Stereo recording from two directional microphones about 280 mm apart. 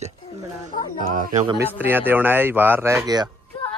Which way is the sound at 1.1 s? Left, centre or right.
Right.